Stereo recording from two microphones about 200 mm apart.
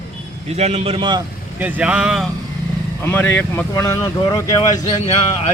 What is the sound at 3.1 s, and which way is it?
Speech, 10° left (ahead or behind).